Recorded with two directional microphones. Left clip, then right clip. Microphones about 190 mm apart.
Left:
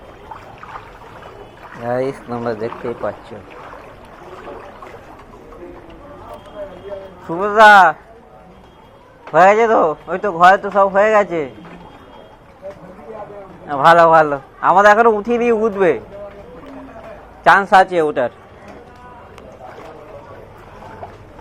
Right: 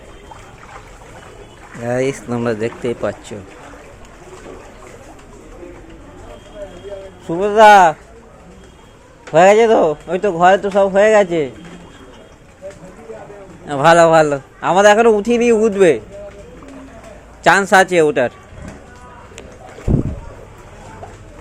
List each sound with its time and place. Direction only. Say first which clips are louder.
1.8 s a man's voice: right 1 dB; 35° right (ahead or behind)
7.4 s a man's voice: even; 35° right (ahead or behind)
9.3 s a man's voice: right 1 dB; 40° right (ahead or behind)
13.7 s a man's voice: even; 55° right (ahead or behind)
17.4 s a man's voice: left 1 dB; 55° right (ahead or behind); by 18.3 s 35° right (ahead or behind)